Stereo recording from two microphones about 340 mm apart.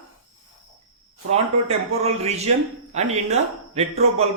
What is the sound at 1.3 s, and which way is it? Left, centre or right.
Speech, centre.